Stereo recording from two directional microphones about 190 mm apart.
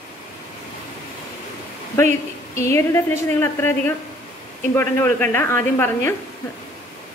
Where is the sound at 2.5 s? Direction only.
15° left (ahead or behind).